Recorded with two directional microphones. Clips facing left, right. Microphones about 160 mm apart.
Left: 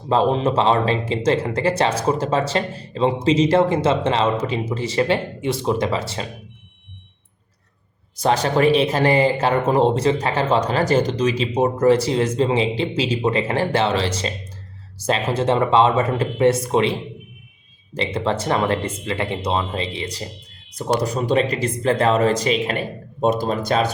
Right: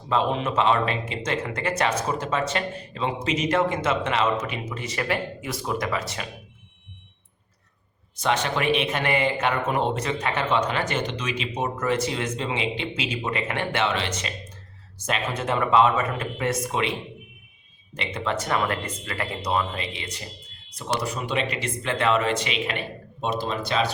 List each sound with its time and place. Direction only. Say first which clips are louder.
0.1 s speech: left 6 dB; 35° left (ahead or behind)
8.1 s speech: left 6 dB; 35° left (ahead or behind)
17.9 s speech: left 6 dB; 35° left (ahead or behind)